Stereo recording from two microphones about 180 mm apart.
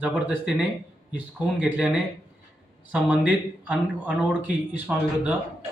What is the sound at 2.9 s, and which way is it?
Speech, 5° right (ahead or behind).